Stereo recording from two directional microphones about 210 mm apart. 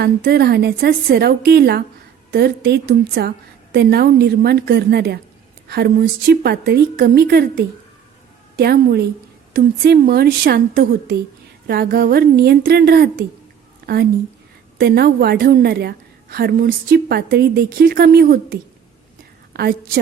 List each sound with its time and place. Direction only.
0.0 s a woman's voice: 50° right (ahead or behind)
8.5 s a woman's voice: 50° right (ahead or behind)